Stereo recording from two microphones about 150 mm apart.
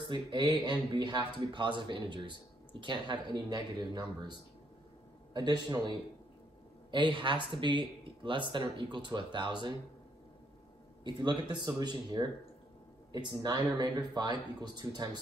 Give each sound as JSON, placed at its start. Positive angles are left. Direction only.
{"t": 0.1, "sound": "speech", "side_deg": -30}
{"t": 11.1, "sound": "speech", "side_deg": -30}